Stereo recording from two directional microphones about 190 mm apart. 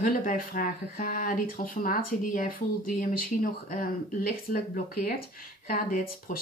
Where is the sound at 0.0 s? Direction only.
45° left (ahead or behind).